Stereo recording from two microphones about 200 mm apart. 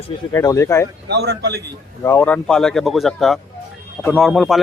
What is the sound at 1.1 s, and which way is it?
Speech, 55° right (ahead or behind).